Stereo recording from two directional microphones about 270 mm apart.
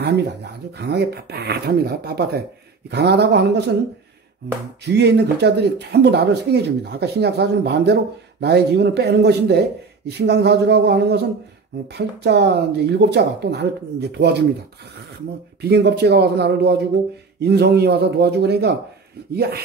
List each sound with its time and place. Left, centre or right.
0.7 s speech: right
4.8 s speech: right
15.6 s speech: right